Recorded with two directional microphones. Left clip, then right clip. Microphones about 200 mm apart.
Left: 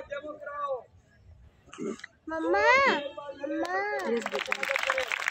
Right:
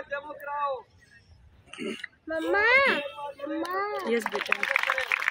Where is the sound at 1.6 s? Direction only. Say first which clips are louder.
Right 1 dB; 25° right (ahead or behind).